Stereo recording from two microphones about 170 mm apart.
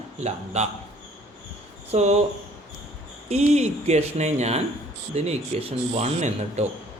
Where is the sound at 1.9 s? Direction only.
40° right (ahead or behind).